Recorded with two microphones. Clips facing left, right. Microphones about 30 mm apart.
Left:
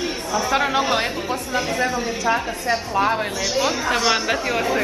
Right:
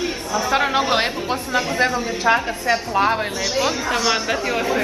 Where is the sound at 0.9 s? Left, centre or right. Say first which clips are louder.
Right 2 dB; right.